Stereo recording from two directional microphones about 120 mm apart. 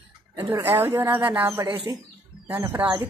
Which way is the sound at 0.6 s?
20° right (ahead or behind).